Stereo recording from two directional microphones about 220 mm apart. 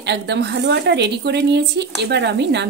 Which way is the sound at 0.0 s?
50° right (ahead or behind).